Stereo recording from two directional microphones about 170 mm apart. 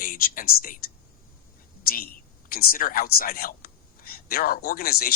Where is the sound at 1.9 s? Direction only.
60° left (ahead or behind).